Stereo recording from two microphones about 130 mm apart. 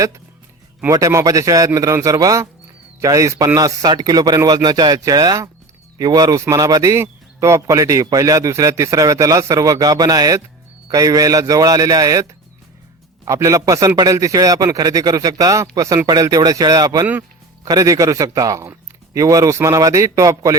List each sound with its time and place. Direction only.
0.9 s a man's voice: 25° right (ahead or behind)
13.2 s a man's voice: 25° right (ahead or behind)